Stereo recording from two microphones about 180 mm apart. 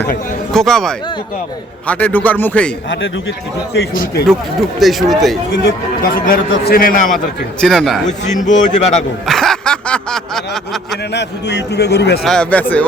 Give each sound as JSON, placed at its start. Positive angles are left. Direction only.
{"t": 0.5, "sound": "a man's voice", "side_deg": 5}
{"t": 3.8, "sound": "speech", "side_deg": 55}
{"t": 4.8, "sound": "speech", "side_deg": 0}
{"t": 6.0, "sound": "speech", "side_deg": 50}
{"t": 7.6, "sound": "speech", "side_deg": 5}
{"t": 8.0, "sound": "speech", "side_deg": 40}
{"t": 9.2, "sound": "a sound", "side_deg": 0}
{"t": 11.1, "sound": "a man's voice", "side_deg": 70}
{"t": 12.2, "sound": "a man's voice", "side_deg": 5}